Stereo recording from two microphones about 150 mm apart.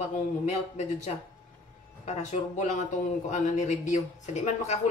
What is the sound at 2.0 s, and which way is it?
A man's voice, 50° left (ahead or behind).